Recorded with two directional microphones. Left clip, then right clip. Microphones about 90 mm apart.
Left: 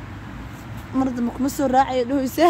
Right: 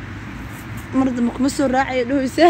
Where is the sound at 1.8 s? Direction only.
35° left (ahead or behind).